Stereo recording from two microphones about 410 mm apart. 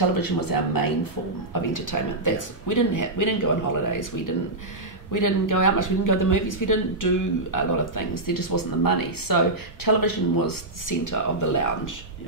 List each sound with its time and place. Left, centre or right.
0.2 s speech: left